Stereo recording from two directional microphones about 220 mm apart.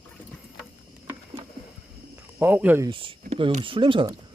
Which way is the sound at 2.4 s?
10° right (ahead or behind).